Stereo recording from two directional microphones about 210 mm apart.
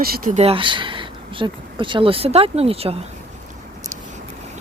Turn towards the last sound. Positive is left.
turn(degrees=-30)  # may be behind; listen again after turning